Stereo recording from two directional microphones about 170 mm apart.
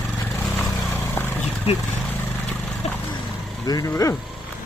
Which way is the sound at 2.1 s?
5° left (ahead or behind).